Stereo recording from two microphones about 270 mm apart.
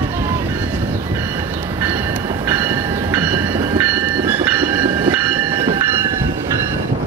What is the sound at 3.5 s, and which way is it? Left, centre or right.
Train, centre.